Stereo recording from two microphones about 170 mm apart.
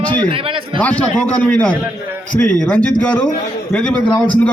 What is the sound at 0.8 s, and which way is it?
A man's voice, 10° left (ahead or behind).